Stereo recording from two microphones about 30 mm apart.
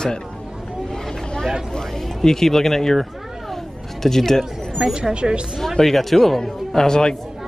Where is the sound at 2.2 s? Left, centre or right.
Centre.